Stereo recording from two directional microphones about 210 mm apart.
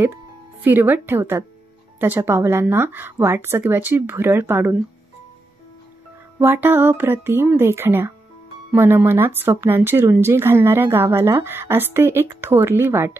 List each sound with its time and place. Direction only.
0.7 s speech: 10° right (ahead or behind)
6.4 s speech: 10° right (ahead or behind)